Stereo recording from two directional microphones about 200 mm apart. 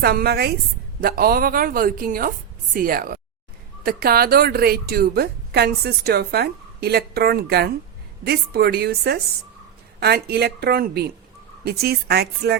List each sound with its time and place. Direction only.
0.0 s a woman's voice: 50° right (ahead or behind)